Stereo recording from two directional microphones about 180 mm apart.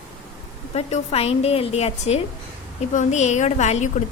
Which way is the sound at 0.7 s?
35° left (ahead or behind).